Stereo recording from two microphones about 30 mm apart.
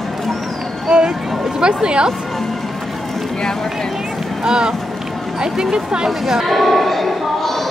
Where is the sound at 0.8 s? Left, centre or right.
Right.